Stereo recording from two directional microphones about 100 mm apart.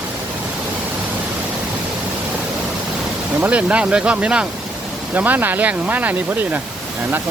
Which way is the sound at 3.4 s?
15° right (ahead or behind).